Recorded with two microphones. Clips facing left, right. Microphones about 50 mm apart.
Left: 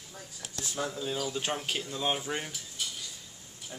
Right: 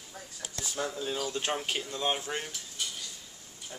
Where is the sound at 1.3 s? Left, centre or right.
Centre.